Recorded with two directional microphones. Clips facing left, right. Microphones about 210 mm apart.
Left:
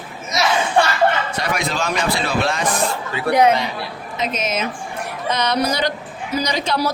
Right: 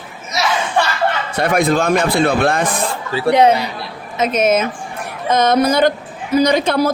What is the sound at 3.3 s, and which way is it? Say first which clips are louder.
Speech: right 3 dB; 25° right (ahead or behind).